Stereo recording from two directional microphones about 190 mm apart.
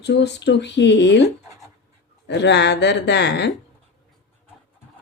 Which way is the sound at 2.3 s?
65° left (ahead or behind).